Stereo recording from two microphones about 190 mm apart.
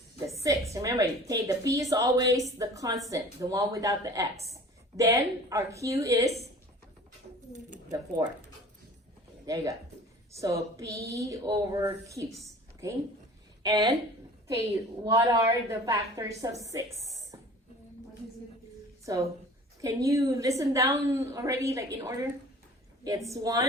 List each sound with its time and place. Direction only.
0.3 s a woman's voice: 15° right (ahead or behind)
7.9 s speech: 20° right (ahead or behind)
9.5 s a woman's voice: 20° right (ahead or behind)
15.0 s a woman's voice: 15° right (ahead or behind)
19.1 s a woman's voice: 20° right (ahead or behind)
23.3 s a woman's voice: 15° right (ahead or behind)